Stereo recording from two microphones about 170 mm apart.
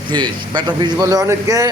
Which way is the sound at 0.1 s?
25° right (ahead or behind).